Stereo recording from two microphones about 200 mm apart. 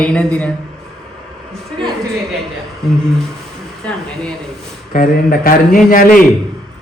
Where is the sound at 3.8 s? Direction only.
5° left (ahead or behind).